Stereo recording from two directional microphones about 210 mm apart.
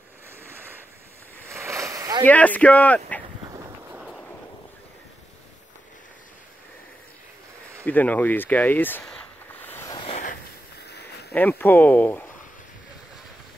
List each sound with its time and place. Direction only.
0.4 s ocean: 10° right (ahead or behind)
1.5 s a sound: 15° right (ahead or behind)
2.2 s speech: 5° left (ahead or behind)
3.4 s a sound: 15° right (ahead or behind)
4.0 s vehicle: centre (ahead or behind)
7.8 s speech: 10° left (ahead or behind)
9.6 s vehicle: 10° left (ahead or behind)
10.0 s a sound: 35° left (ahead or behind); by 11.3 s 50° left (ahead or behind)
11.3 s speech: 10° left (ahead or behind)